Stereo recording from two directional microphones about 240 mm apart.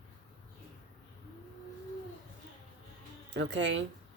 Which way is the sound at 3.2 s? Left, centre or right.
Right.